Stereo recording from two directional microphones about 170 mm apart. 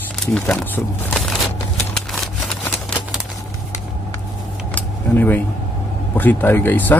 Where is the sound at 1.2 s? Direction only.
Centre (ahead or behind).